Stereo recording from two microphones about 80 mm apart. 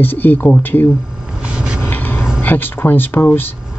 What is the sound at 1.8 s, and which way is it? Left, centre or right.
Vehicle, left.